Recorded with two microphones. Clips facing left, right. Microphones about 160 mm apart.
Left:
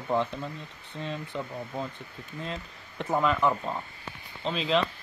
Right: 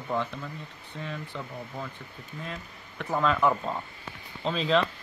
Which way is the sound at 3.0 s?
20° left (ahead or behind).